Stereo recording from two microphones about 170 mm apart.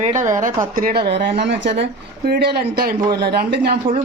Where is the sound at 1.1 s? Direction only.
90° right.